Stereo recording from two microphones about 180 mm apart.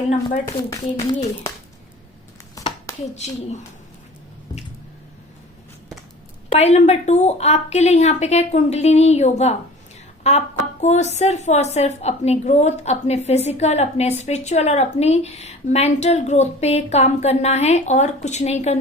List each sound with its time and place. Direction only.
0.4 s a woman's voice: 15° left (ahead or behind)
2.9 s a sound: 20° left (ahead or behind)
6.5 s a woman's voice: 35° left (ahead or behind)